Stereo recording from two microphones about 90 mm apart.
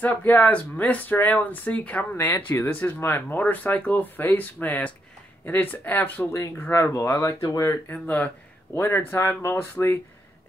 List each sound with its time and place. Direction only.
0.0 s speech: 20° left (ahead or behind)
2.1 s speech: 30° left (ahead or behind)
6.7 s speech: 35° left (ahead or behind)
7.9 s speech: 20° left (ahead or behind)